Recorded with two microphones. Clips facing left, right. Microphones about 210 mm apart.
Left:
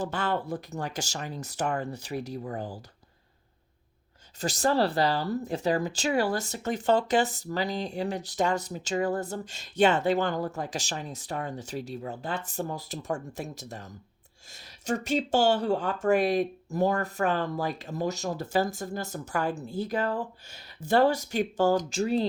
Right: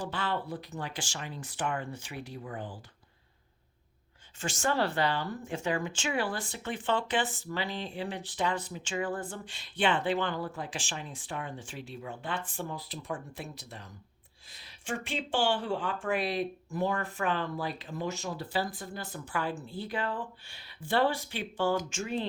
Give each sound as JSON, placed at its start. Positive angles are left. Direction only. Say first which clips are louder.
{"t": 0.1, "sound": "speech", "louder": "left 4 dB", "side_deg": 45}
{"t": 4.4, "sound": "speech", "louder": "left 5 dB", "side_deg": 40}
{"t": 14.8, "sound": "speech", "louder": "left 8 dB", "side_deg": 40}